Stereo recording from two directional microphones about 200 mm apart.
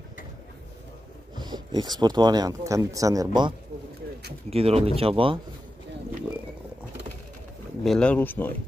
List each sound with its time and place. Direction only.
1.4 s speech: 20° right (ahead or behind)
4.5 s speech: 30° right (ahead or behind)
7.8 s speech: 5° left (ahead or behind)